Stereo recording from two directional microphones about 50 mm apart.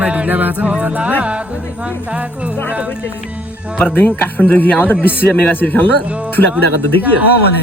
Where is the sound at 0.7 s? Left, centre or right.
Right.